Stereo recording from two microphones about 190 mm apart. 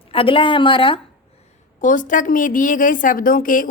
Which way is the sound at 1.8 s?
40° left (ahead or behind).